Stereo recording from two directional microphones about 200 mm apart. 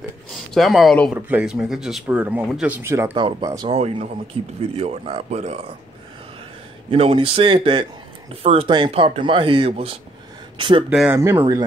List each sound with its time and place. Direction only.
0.6 s speech: centre (ahead or behind)
3.2 s speech: 25° right (ahead or behind)
6.9 s speech: 30° right (ahead or behind)
10.9 s speech: 5° right (ahead or behind)